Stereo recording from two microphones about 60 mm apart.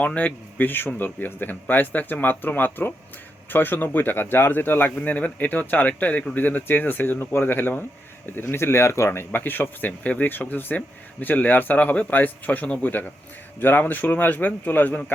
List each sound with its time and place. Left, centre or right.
0.0 s a man's voice: left